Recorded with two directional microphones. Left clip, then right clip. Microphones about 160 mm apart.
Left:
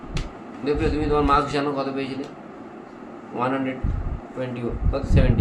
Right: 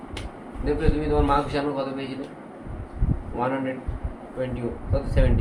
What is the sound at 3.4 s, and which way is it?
Speech, 30° left (ahead or behind).